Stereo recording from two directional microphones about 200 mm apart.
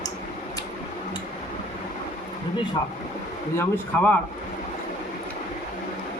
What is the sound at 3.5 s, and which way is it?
Speech, 5° left (ahead or behind).